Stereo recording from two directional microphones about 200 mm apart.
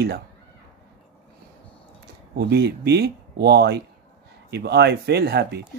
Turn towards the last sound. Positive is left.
turn(degrees=-55)  # may be behind; listen again after turning